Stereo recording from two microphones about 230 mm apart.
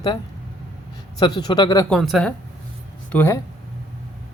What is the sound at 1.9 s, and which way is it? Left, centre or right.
Speech, centre.